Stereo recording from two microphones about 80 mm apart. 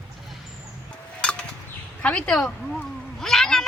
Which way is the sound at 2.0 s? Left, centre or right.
Centre.